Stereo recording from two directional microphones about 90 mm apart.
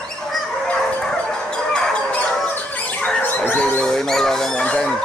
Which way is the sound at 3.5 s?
10° left (ahead or behind).